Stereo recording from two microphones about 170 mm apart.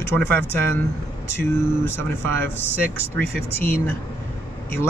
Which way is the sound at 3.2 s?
15° left (ahead or behind).